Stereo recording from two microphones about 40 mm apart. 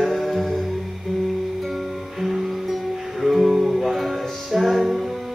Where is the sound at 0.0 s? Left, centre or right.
Centre.